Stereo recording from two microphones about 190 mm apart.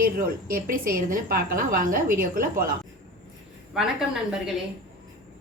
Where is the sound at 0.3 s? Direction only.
50° right (ahead or behind).